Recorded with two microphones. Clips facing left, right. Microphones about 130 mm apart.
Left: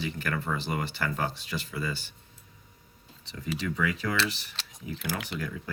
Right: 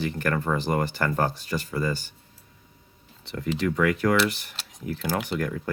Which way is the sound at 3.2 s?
60° right (ahead or behind).